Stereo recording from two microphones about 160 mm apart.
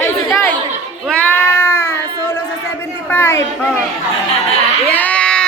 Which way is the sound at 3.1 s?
15° left (ahead or behind).